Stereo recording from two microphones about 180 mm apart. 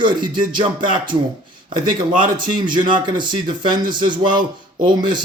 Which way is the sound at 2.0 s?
25° right (ahead or behind).